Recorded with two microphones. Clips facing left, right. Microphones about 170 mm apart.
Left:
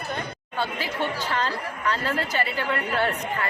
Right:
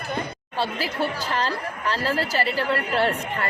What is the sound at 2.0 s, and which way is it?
A woman's voice, 30° right (ahead or behind).